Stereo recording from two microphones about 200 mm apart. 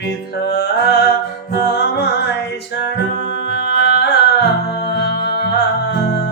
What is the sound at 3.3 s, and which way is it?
Music, 60° left (ahead or behind).